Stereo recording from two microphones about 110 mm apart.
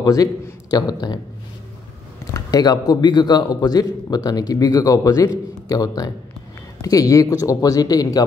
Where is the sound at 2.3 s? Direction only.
35° left (ahead or behind).